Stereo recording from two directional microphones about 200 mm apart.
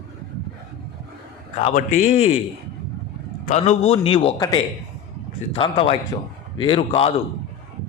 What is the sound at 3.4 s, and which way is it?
Speech, 35° left (ahead or behind).